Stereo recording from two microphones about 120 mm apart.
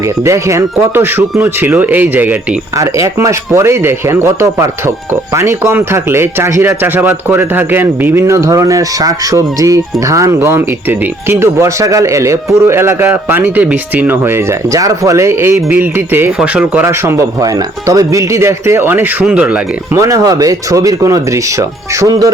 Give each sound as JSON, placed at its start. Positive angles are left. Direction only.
{"t": 0.3, "sound": "speech", "side_deg": -25}
{"t": 2.7, "sound": "speech", "side_deg": -25}
{"t": 16.8, "sound": "speech", "side_deg": -25}
{"t": 20.0, "sound": "speech", "side_deg": -25}